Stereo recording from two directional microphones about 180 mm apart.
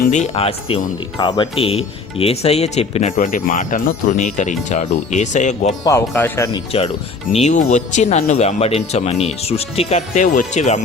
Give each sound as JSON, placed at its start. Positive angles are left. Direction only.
{"t": 0.0, "sound": "speech", "side_deg": 40}
{"t": 1.2, "sound": "speech", "side_deg": 25}
{"t": 5.8, "sound": "speech", "side_deg": 15}
{"t": 6.5, "sound": "speech", "side_deg": 30}
{"t": 7.3, "sound": "speech", "side_deg": 40}